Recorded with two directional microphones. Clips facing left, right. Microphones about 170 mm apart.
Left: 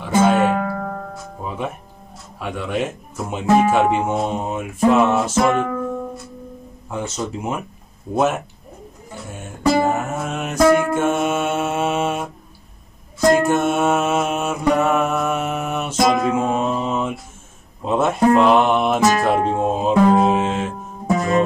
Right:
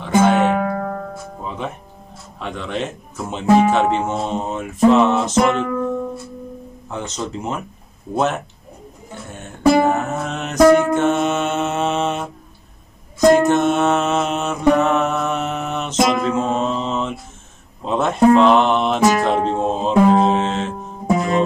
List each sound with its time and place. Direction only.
0.2 s music: 10° left (ahead or behind)
0.6 s music: 10° right (ahead or behind)
1.4 s music: 5° left (ahead or behind)
2.4 s speech: 10° left (ahead or behind)
6.9 s speech: 10° left (ahead or behind)
9.8 s music: 10° left (ahead or behind)
13.4 s music: 10° left (ahead or behind)
21.1 s music: 15° right (ahead or behind)